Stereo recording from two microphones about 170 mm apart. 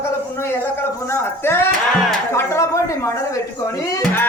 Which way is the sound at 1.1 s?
15° left (ahead or behind).